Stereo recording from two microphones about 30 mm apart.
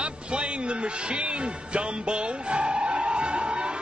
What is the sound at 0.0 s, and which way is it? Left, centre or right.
Music, right.